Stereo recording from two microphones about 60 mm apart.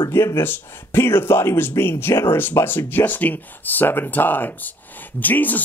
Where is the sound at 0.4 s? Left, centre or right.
Left.